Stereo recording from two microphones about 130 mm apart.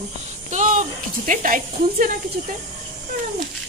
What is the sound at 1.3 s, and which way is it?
Speech, 90° right.